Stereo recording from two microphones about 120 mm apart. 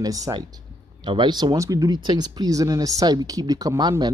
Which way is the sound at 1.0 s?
40° right (ahead or behind).